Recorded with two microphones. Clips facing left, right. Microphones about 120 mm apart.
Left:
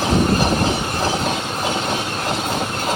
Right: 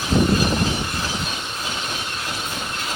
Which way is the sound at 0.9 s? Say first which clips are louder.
Left 7 dB; 50° left (ahead or behind).